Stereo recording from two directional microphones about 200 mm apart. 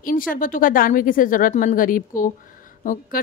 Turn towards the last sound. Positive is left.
turn(degrees=40)  # may be behind; listen again after turning